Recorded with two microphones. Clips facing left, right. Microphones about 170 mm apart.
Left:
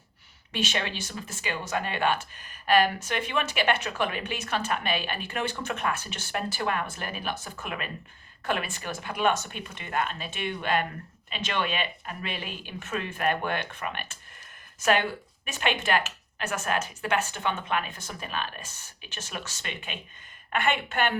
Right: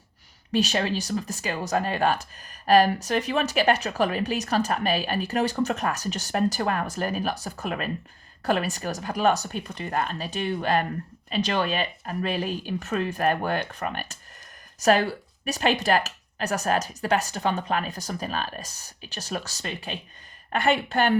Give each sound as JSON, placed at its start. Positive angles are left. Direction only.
{"t": 0.5, "sound": "speech", "side_deg": -40}